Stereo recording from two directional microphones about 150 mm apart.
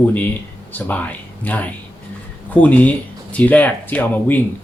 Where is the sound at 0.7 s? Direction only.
10° left (ahead or behind).